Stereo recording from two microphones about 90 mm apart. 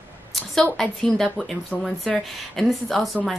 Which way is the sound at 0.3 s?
Centre (ahead or behind).